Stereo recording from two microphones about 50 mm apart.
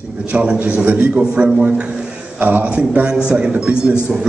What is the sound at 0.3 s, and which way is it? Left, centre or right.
A man's voice, right.